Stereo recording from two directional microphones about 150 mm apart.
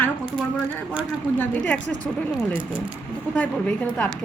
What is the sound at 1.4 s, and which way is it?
Speech, 10° left (ahead or behind).